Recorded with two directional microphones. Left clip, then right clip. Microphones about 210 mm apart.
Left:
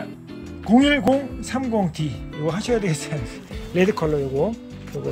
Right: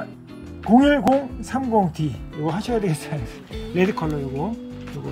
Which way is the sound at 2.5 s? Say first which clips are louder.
Left 2 dB; 25° left (ahead or behind).